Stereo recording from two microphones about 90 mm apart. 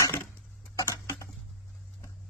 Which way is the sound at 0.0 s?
25° left (ahead or behind).